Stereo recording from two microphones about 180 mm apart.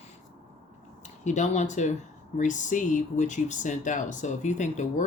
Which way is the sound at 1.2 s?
40° left (ahead or behind).